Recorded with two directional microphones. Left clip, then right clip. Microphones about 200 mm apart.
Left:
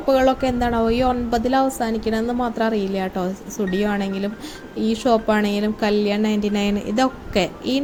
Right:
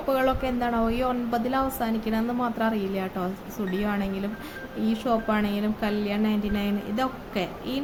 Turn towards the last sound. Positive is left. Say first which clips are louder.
# left 9 dB
turn(degrees=30)  # may be behind; listen again after turning